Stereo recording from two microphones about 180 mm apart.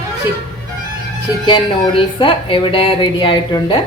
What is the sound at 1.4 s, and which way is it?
Speech, 25° left (ahead or behind).